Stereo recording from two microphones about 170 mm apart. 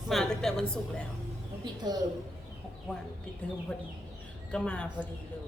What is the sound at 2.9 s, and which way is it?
A woman's voice, centre (ahead or behind).